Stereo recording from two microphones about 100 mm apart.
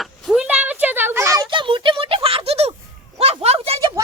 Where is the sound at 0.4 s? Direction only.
15° right (ahead or behind).